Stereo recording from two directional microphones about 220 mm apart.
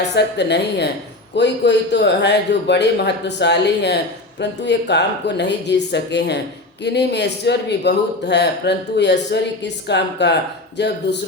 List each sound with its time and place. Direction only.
0.0 s a man's voice: 50° left (ahead or behind)